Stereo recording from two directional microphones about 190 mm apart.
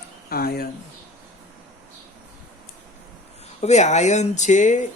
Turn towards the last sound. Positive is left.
turn(degrees=40)  # may be behind; listen again after turning